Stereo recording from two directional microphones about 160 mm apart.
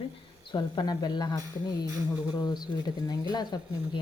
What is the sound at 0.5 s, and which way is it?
Speech, 25° left (ahead or behind).